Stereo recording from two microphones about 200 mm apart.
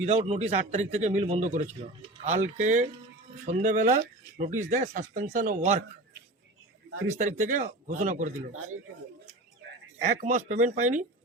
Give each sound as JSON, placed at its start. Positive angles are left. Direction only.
{"t": 0.0, "sound": "a man's voice", "side_deg": -30}
{"t": 7.2, "sound": "a man's voice", "side_deg": -40}
{"t": 10.2, "sound": "a man's voice", "side_deg": -35}